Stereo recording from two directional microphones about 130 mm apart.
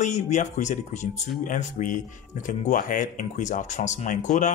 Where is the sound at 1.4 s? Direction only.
80° left.